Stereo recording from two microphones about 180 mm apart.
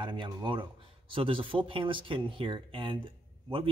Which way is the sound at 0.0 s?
25° right (ahead or behind).